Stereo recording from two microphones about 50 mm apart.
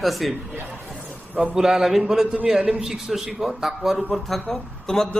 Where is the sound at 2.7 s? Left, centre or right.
Centre.